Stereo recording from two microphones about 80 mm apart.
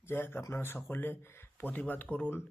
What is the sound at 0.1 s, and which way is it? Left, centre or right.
Speech, left.